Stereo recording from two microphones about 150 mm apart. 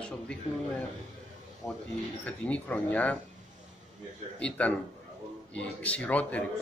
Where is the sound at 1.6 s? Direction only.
20° left (ahead or behind).